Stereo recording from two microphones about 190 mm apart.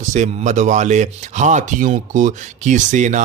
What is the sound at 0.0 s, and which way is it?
Speech, 40° right (ahead or behind).